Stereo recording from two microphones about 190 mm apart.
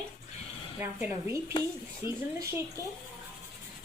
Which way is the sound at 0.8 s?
10° right (ahead or behind).